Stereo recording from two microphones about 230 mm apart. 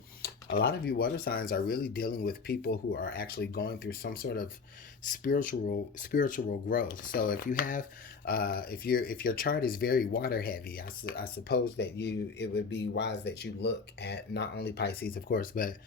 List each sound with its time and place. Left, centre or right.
0.4 s speech: left